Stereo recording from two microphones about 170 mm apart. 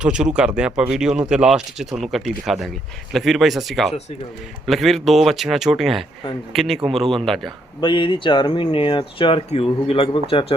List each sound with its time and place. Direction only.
0.0 s speech: 5° right (ahead or behind)
7.8 s speech: 30° left (ahead or behind)